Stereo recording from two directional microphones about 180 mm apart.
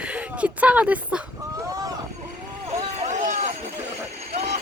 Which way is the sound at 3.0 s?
40° right (ahead or behind).